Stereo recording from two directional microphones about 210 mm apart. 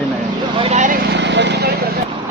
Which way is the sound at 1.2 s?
55° right (ahead or behind).